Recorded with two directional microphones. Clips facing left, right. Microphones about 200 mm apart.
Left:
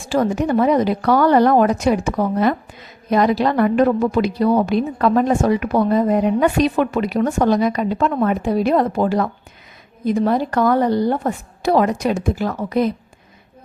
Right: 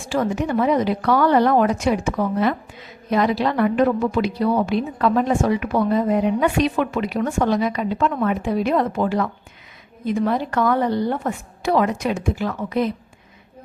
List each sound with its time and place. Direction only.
0.1 s a woman's voice: 40° left (ahead or behind)